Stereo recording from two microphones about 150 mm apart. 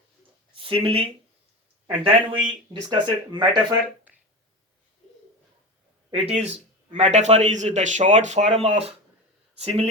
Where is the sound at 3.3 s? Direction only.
30° right (ahead or behind).